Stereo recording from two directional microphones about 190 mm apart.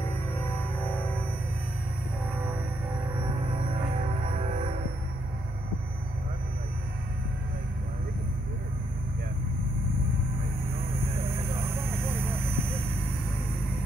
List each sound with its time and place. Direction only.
11.1 s vehicle: 30° right (ahead or behind)
11.5 s vehicle: 15° right (ahead or behind)